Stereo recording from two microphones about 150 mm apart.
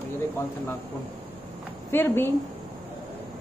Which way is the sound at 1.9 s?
15° left (ahead or behind).